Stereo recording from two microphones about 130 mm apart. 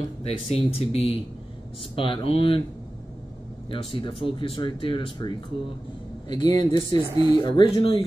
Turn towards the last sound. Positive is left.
turn(degrees=40)  # may be behind; listen again after turning